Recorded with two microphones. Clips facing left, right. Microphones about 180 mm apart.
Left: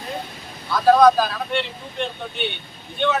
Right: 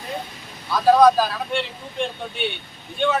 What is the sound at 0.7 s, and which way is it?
Speech, 10° right (ahead or behind).